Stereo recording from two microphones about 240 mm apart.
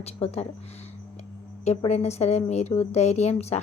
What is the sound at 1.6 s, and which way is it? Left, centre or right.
A woman's voice, left.